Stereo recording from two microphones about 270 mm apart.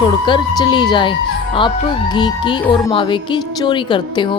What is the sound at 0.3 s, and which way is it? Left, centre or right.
A woman's voice, centre.